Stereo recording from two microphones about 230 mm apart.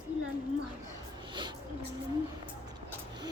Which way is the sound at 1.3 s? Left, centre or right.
Centre.